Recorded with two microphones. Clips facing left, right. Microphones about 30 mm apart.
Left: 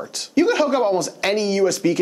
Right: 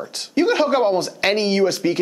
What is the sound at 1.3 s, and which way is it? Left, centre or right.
Speech, right.